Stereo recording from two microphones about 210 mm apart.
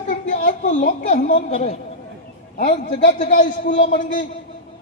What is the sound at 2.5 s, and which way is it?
A man's voice, 40° left (ahead or behind).